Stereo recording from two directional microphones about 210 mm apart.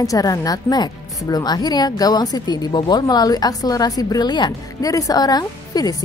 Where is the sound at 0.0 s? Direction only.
15° left (ahead or behind).